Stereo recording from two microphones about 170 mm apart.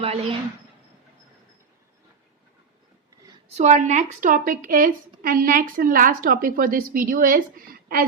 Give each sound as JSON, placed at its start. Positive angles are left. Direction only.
{"t": 0.0, "sound": "a woman's voice", "side_deg": -35}
{"t": 3.6, "sound": "speech", "side_deg": -45}